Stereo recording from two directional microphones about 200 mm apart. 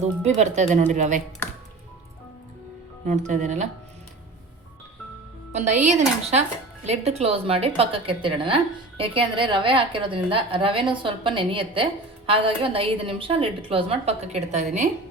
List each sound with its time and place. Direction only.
0.3 s speech: 35° right (ahead or behind)
3.1 s speech: 35° right (ahead or behind)
5.5 s a woman's voice: 35° right (ahead or behind)